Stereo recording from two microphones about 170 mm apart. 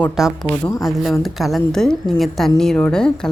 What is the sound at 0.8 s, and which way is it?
A woman's voice, centre (ahead or behind).